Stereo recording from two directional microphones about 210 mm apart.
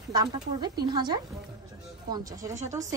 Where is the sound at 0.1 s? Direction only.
20° right (ahead or behind).